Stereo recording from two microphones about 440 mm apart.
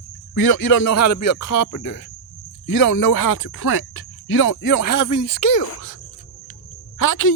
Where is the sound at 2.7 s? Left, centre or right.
Left.